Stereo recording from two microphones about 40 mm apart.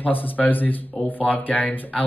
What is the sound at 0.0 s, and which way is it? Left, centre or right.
Speech, left.